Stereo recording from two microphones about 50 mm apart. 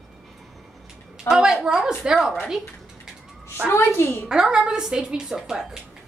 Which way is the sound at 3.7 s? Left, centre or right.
Left.